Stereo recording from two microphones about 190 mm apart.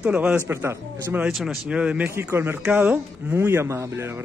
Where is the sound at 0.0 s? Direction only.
5° right (ahead or behind).